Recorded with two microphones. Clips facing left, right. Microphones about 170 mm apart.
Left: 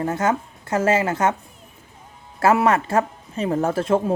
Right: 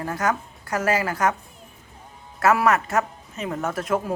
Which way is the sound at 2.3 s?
30° left (ahead or behind).